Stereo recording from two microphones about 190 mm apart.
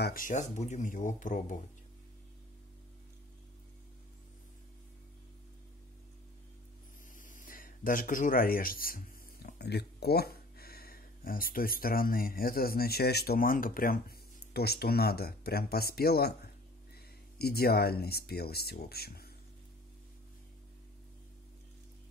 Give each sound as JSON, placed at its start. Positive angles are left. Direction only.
{"t": 0.0, "sound": "speech", "side_deg": 45}
{"t": 7.2, "sound": "speech", "side_deg": 45}